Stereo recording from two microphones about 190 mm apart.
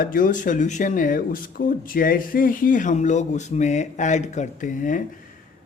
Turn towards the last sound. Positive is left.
turn(degrees=45)  # may be behind; listen again after turning